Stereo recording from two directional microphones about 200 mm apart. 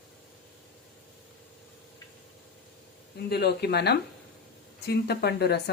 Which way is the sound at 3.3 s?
55° left (ahead or behind).